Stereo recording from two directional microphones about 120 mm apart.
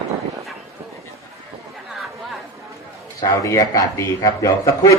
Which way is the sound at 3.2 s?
30° left (ahead or behind).